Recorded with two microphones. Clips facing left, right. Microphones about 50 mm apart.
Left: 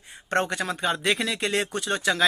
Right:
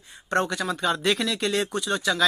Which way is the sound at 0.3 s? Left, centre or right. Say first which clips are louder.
Right 1 dB; left.